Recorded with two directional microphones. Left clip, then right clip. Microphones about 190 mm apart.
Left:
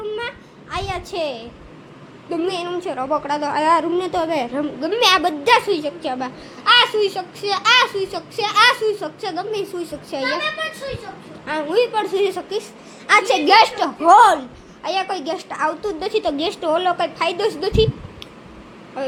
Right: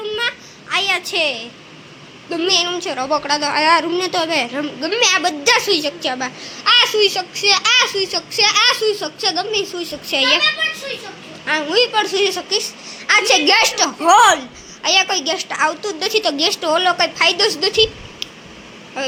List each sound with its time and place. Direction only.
0.0 s a sound: centre (ahead or behind)
2.3 s a child's voice: centre (ahead or behind)
3.2 s a woman's voice: 10° left (ahead or behind)
5.5 s a child's voice: centre (ahead or behind)
11.4 s a child's voice: centre (ahead or behind)
14.8 s a child's voice: 5° right (ahead or behind)
17.6 s a sound: 5° left (ahead or behind)